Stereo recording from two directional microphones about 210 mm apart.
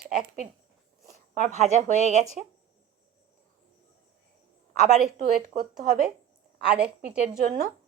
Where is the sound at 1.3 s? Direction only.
35° right (ahead or behind).